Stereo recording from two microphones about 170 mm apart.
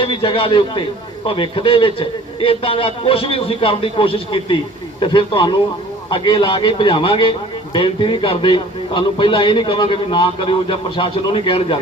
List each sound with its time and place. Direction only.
0.0 s a man's voice: 30° left (ahead or behind)